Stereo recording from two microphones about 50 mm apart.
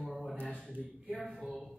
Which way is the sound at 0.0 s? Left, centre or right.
Centre.